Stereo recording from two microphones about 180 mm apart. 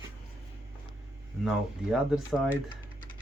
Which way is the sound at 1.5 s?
Centre (ahead or behind).